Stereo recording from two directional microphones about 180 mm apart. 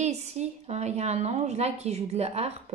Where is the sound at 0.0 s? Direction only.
40° right (ahead or behind).